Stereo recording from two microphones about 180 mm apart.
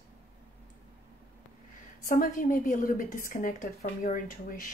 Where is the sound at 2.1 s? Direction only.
50° left (ahead or behind).